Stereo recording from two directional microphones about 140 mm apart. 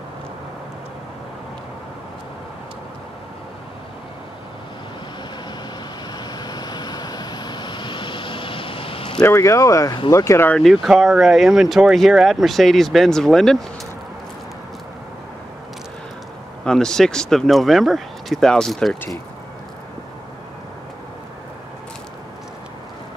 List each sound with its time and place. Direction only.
6.1 s vehicle: 30° left (ahead or behind)
9.2 s speech: 20° left (ahead or behind)
10.5 s speech: centre (ahead or behind)
16.6 s speech: 5° left (ahead or behind)